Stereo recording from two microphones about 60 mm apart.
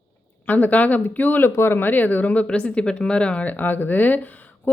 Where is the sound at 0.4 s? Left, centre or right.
Left.